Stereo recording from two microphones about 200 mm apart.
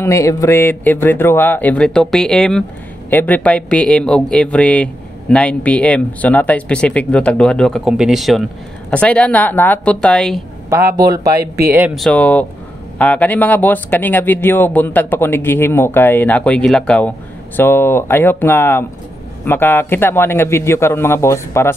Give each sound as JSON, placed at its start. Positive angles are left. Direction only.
{"t": 0.0, "sound": "speech", "side_deg": 15}
{"t": 10.7, "sound": "speech", "side_deg": -15}
{"t": 11.7, "sound": "speech", "side_deg": -5}